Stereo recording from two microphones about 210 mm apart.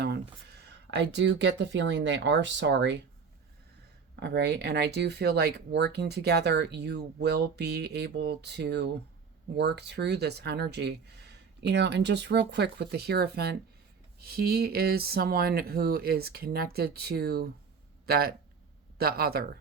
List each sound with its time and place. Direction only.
0.0 s speech: 50° right (ahead or behind)
4.1 s speech: 55° right (ahead or behind)